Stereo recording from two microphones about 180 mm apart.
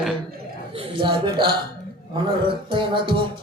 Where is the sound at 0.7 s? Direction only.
25° right (ahead or behind).